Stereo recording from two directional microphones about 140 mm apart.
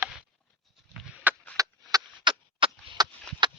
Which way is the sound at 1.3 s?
10° right (ahead or behind).